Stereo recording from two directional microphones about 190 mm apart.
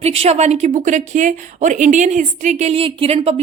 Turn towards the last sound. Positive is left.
turn(degrees=-30)  # may be behind; listen again after turning